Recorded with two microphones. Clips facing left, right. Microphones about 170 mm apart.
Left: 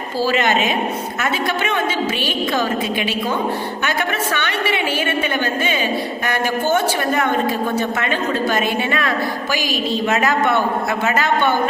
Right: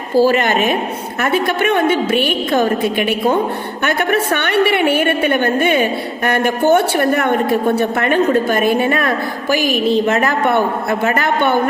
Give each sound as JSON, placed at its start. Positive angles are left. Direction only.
{"t": 0.2, "sound": "a woman's voice", "side_deg": -50}